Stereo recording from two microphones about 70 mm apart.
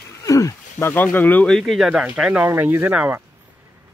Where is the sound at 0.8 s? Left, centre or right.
Left.